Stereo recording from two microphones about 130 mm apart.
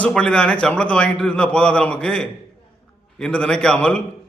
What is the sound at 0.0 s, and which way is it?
A man's voice, 5° left (ahead or behind).